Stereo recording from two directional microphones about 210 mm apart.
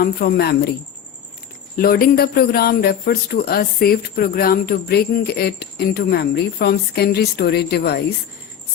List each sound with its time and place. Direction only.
0.0 s a man's voice: 45° left (ahead or behind)
1.7 s a man's voice: 45° left (ahead or behind)